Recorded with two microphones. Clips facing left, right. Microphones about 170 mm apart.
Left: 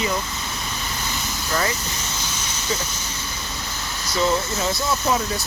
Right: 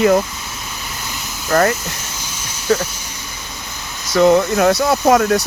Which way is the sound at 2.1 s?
10° right (ahead or behind).